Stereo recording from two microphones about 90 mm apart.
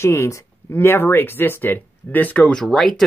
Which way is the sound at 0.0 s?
30° left (ahead or behind).